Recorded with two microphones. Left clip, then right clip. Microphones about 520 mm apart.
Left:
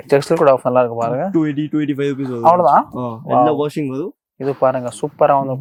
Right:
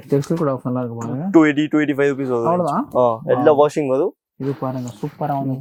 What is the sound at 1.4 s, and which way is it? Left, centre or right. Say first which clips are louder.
Speech: right 3 dB; right.